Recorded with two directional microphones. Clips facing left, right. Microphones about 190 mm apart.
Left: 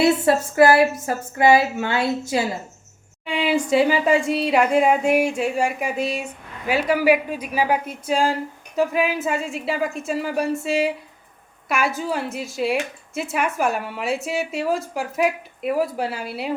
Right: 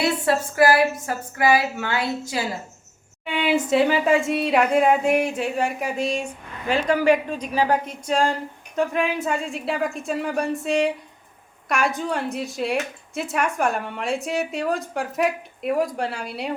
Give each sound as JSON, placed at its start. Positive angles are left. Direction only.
{"t": 0.0, "sound": "speech", "side_deg": 25}
{"t": 3.2, "sound": "speech", "side_deg": 0}